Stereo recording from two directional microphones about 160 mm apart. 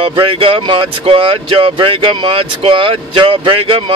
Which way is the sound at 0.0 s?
35° right (ahead or behind).